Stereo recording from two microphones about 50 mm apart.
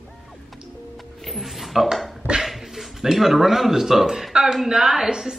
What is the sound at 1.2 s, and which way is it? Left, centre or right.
A man's voice, centre.